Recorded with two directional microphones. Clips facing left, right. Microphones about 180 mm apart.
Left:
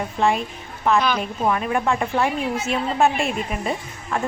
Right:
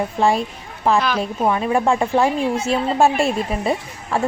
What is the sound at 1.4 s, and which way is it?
Speech, 30° right (ahead or behind).